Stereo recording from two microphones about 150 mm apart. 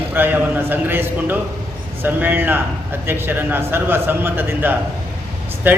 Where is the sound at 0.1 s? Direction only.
15° right (ahead or behind).